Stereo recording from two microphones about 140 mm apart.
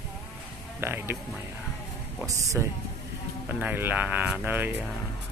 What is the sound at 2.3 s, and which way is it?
Speech, 25° right (ahead or behind).